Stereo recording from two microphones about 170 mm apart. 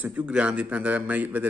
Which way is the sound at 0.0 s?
10° right (ahead or behind).